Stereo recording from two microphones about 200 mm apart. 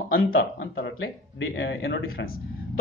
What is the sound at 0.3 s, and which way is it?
Speech, 75° left (ahead or behind).